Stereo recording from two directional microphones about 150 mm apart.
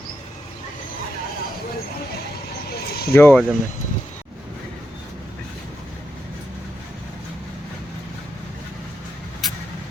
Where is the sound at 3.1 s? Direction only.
15° left (ahead or behind).